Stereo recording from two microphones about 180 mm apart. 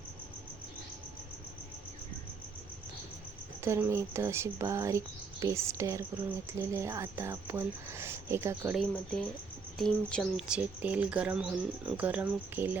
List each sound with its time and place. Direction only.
3.6 s speech: 15° right (ahead or behind)
8.7 s speech: centre (ahead or behind)